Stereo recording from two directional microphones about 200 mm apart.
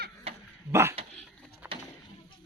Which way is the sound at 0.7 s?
10° right (ahead or behind).